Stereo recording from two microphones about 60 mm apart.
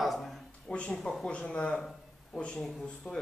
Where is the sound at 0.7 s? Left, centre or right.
Centre.